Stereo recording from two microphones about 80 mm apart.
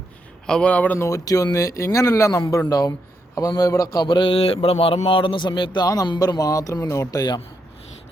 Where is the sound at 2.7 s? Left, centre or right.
Left.